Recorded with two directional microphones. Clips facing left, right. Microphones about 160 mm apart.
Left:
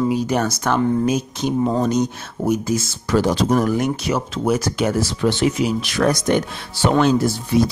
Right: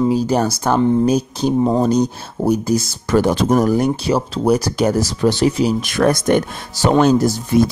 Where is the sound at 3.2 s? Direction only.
55° right (ahead or behind).